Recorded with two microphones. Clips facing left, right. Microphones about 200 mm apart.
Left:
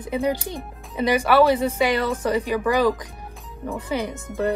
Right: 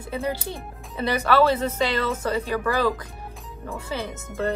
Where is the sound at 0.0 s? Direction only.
15° left (ahead or behind).